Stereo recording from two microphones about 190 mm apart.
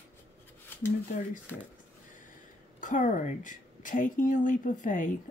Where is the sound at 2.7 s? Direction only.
40° left (ahead or behind).